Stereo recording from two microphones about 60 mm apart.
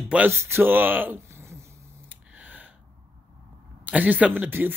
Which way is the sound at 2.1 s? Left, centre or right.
Right.